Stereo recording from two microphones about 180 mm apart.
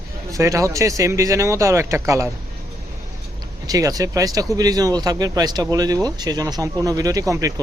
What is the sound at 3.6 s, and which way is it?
Speech, 20° right (ahead or behind).